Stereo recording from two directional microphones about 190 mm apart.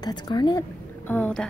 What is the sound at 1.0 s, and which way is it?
Speech, 10° left (ahead or behind).